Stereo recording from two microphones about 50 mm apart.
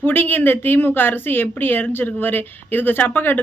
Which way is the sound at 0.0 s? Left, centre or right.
Left.